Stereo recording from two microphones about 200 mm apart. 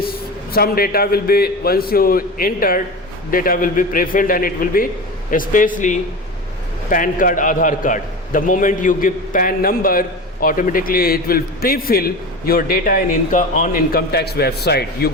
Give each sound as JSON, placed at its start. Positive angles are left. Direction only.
{"t": 0.0, "sound": "a man's voice", "side_deg": 50}